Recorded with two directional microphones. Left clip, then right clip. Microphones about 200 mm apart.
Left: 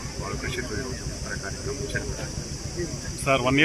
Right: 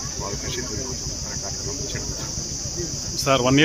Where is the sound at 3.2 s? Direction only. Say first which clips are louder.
Right 3 dB; 25° right (ahead or behind).